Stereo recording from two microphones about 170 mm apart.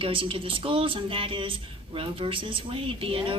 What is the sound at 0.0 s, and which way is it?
Speech, 30° right (ahead or behind).